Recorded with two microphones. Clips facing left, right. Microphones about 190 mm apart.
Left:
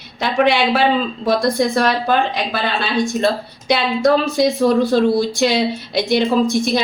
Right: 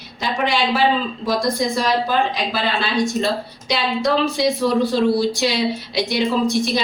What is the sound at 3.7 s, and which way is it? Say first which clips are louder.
Speech: left 5 dB; 50° left (ahead or behind).